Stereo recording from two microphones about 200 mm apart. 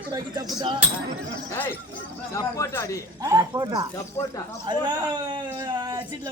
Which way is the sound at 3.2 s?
20° right (ahead or behind).